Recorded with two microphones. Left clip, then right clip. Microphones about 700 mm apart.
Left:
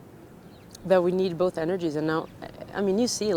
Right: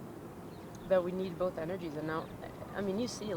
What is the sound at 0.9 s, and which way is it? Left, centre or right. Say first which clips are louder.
Speech: left 9 dB; left.